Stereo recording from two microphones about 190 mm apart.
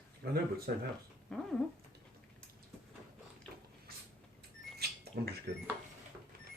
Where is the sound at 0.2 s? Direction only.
50° right (ahead or behind).